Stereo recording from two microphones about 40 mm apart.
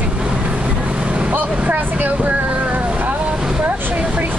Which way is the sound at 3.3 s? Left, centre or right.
Right.